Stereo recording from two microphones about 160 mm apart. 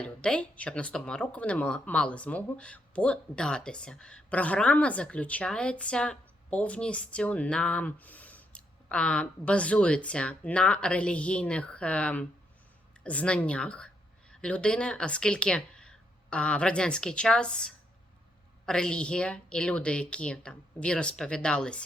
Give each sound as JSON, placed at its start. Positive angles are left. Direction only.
{"t": 0.0, "sound": "a woman's voice", "side_deg": 5}